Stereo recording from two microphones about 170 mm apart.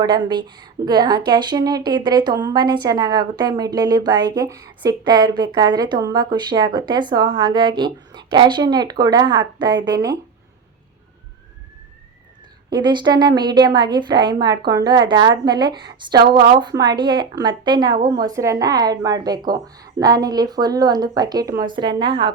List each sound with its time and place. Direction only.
0.0 s speech: 25° right (ahead or behind)
12.7 s speech: 25° right (ahead or behind)